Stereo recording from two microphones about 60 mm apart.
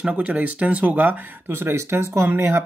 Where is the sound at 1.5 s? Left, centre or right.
Right.